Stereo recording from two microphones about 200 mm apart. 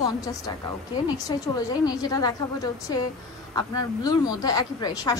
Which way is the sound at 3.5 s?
20° left (ahead or behind).